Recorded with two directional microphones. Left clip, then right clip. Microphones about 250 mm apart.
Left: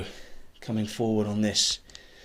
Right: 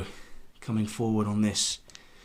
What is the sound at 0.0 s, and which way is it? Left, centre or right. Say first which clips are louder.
Speech: left 2 dB; right.